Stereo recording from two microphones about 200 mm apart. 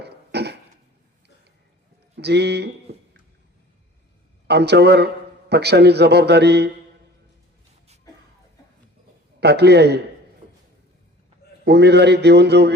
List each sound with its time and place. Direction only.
0.0 s a sound: 55° right (ahead or behind)
2.1 s speech: 55° right (ahead or behind)
4.4 s a man's voice: 55° right (ahead or behind)
9.4 s a man's voice: 55° right (ahead or behind)
11.6 s a man's voice: 55° right (ahead or behind)